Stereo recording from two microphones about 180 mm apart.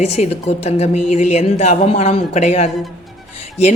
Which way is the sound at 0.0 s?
35° left (ahead or behind).